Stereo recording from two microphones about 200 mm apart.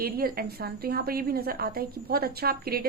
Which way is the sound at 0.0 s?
50° right (ahead or behind).